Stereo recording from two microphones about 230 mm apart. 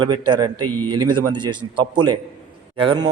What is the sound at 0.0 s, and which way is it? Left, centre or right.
A man's voice, centre.